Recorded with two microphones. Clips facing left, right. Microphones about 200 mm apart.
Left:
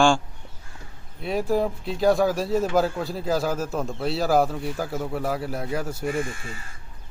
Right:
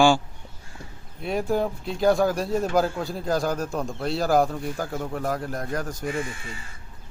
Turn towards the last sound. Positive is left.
turn(degrees=50)  # may be behind; listen again after turning